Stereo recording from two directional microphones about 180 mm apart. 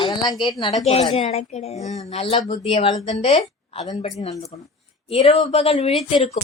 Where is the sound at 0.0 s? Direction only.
25° left (ahead or behind).